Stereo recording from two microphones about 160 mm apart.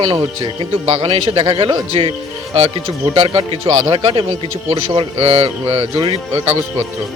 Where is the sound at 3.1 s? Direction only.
35° right (ahead or behind).